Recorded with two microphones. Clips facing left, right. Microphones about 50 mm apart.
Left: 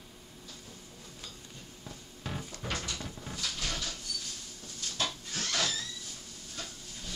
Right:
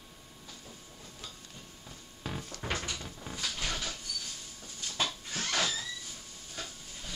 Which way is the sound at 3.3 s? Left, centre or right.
Right.